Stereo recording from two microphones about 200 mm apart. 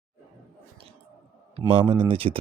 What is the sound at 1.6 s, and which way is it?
Speech, 30° right (ahead or behind).